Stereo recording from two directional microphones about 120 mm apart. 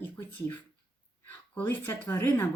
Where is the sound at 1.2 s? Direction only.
15° left (ahead or behind).